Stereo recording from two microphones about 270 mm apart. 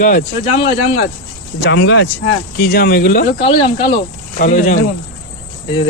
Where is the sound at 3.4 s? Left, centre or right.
Left.